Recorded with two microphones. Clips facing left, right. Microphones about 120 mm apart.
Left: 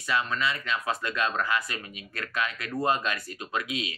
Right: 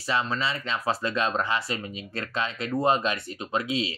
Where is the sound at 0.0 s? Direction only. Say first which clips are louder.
Right 1 dB; 30° right (ahead or behind).